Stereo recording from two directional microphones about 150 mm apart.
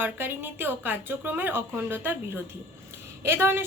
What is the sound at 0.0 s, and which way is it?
A woman's voice, 15° right (ahead or behind).